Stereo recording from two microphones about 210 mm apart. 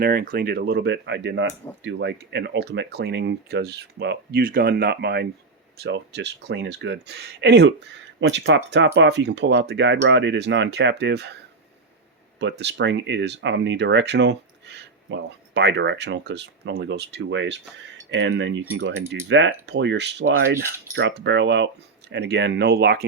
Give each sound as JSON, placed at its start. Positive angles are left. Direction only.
{"t": 0.0, "sound": "speech", "side_deg": -45}
{"t": 12.4, "sound": "speech", "side_deg": -55}